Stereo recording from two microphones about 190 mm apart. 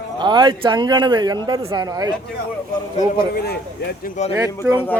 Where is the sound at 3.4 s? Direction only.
55° left (ahead or behind).